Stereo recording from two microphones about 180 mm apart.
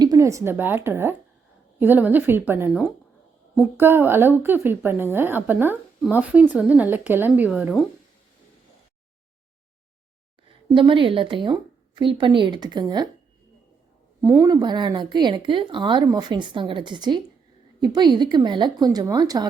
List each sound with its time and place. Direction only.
0.0 s a woman's voice: 20° right (ahead or behind)
10.7 s a woman's voice: 30° right (ahead or behind)
14.2 s a woman's voice: 15° right (ahead or behind)